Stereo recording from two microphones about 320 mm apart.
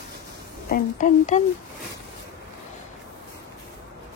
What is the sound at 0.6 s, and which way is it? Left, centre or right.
Speech, left.